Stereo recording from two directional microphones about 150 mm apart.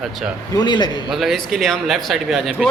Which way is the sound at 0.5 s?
30° left (ahead or behind).